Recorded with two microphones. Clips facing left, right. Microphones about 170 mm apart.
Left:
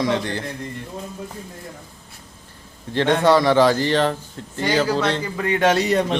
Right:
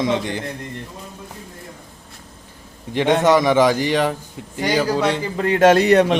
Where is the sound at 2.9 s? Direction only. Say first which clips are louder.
Right 1 dB; 15° right (ahead or behind).